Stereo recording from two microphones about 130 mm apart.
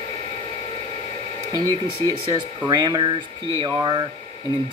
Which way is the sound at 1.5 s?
30° right (ahead or behind).